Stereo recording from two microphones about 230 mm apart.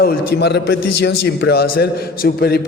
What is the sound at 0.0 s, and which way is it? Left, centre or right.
Speech, left.